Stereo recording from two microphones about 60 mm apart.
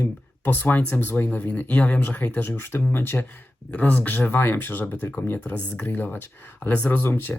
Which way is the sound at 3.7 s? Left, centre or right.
Left.